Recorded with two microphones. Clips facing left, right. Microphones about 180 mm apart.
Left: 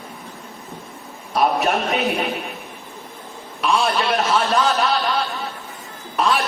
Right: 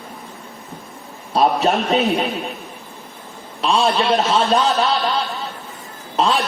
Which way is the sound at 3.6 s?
25° right (ahead or behind).